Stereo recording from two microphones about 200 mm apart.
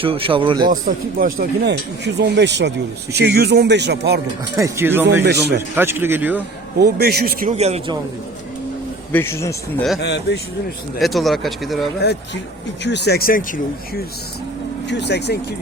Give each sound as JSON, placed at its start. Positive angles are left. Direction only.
{"t": 0.0, "sound": "speech", "side_deg": -25}
{"t": 0.7, "sound": "a man's voice", "side_deg": -45}
{"t": 1.6, "sound": "speech", "side_deg": -60}
{"t": 4.5, "sound": "speech", "side_deg": -15}
{"t": 5.2, "sound": "speech", "side_deg": -55}
{"t": 5.5, "sound": "speech", "side_deg": -10}
{"t": 6.7, "sound": "a man's voice", "side_deg": -55}
{"t": 7.5, "sound": "speech", "side_deg": -30}
{"t": 9.1, "sound": "speech", "side_deg": 10}
{"t": 10.0, "sound": "speech", "side_deg": 55}
{"t": 11.0, "sound": "speech", "side_deg": 0}
{"t": 12.0, "sound": "speech", "side_deg": 55}
{"t": 14.8, "sound": "speech", "side_deg": 60}